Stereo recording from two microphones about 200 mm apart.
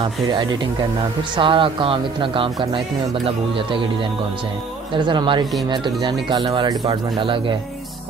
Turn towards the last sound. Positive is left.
turn(degrees=-25)  # may be behind; listen again after turning